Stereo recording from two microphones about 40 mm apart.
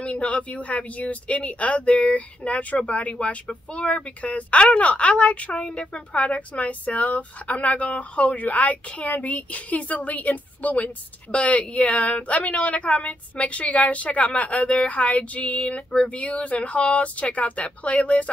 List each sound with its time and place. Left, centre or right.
0.0 s speech: left